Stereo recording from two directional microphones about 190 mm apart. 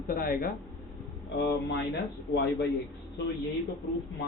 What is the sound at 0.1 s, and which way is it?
A man's voice, 50° left (ahead or behind).